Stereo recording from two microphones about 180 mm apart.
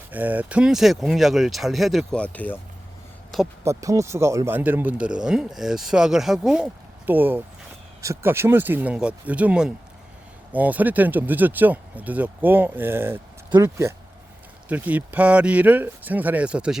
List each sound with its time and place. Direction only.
0.1 s speech: 10° right (ahead or behind); by 2.6 s 10° left (ahead or behind)
3.6 s speech: 15° right (ahead or behind)